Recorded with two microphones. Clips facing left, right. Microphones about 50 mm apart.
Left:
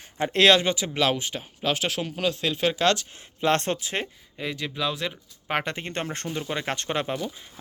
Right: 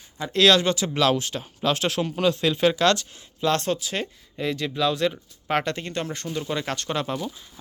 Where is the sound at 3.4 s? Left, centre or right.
Left.